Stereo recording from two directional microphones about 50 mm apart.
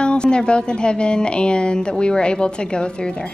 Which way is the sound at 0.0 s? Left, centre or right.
Centre.